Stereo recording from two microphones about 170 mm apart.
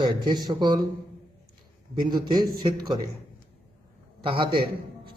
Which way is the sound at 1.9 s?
25° right (ahead or behind).